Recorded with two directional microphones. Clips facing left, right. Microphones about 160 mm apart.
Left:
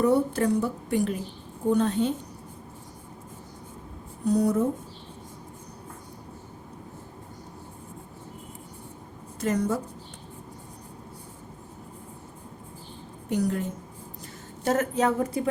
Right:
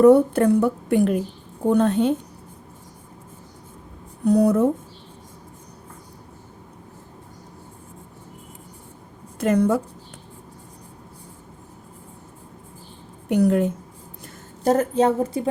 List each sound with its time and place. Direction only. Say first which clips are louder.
0.0 s a woman's voice: right 9 dB; 55° right (ahead or behind)
4.3 s a woman's voice: right 6 dB; 60° right (ahead or behind)
9.4 s a woman's voice: right 7 dB; 60° right (ahead or behind)
13.2 s a woman's voice: right 8 dB; 65° right (ahead or behind)
14.6 s a woman's voice: right 6 dB; 35° right (ahead or behind)